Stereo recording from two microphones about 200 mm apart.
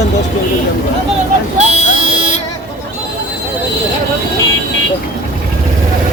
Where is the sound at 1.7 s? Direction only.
40° left (ahead or behind).